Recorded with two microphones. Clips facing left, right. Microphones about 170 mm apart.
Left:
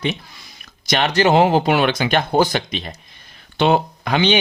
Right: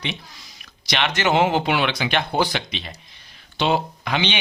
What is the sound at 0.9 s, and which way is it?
Speech, 40° left (ahead or behind).